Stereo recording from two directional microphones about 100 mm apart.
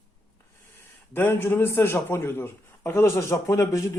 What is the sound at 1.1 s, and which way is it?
A man's voice, 25° left (ahead or behind).